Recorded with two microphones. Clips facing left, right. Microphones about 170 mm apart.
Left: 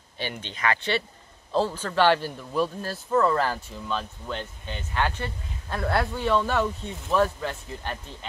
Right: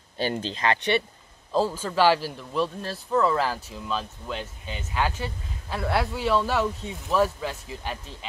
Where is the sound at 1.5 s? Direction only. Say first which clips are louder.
Right 1 dB; 10° right (ahead or behind).